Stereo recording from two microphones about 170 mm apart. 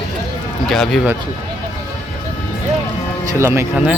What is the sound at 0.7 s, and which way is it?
Speech, centre (ahead or behind).